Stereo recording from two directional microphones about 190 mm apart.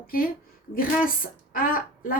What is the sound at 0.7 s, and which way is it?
Speech, 50° left (ahead or behind).